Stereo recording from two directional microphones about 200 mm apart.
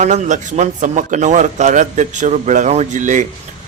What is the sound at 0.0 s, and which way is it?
A man's voice, 40° right (ahead or behind).